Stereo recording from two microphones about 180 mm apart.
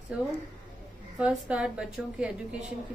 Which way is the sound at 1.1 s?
5° right (ahead or behind).